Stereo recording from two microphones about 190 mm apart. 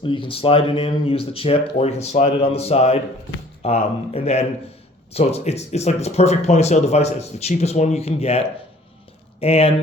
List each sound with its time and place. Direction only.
0.0 s speech: 25° left (ahead or behind)